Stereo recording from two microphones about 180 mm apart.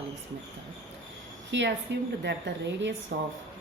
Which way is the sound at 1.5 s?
85° right.